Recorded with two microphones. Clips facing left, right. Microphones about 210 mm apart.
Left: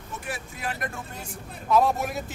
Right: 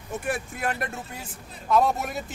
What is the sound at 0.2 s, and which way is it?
Speech, 50° right (ahead or behind).